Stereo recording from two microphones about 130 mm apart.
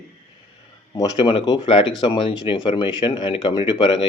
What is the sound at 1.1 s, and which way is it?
Speech, 40° left (ahead or behind).